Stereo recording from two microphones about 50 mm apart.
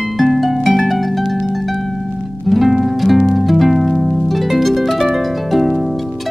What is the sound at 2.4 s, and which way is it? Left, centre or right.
Music, centre.